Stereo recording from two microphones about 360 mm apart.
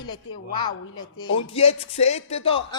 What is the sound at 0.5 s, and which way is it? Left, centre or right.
Speech, centre.